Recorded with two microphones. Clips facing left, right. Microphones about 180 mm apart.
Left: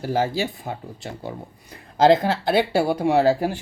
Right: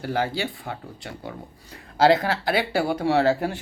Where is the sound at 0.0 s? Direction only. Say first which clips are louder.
Left 3 dB; 25° left (ahead or behind).